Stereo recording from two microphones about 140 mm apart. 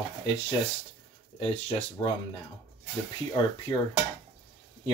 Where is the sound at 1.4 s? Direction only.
45° left (ahead or behind).